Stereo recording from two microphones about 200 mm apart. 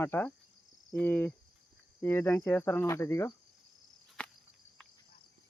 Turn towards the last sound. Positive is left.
turn(degrees=5)  # may be behind; listen again after turning